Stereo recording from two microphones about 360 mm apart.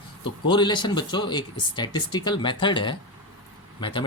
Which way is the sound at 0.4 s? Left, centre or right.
Centre.